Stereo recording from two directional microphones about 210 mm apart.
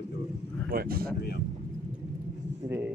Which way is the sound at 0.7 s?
45° right (ahead or behind).